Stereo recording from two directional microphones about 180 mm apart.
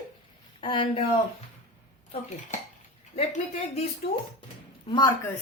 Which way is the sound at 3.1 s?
40° left (ahead or behind).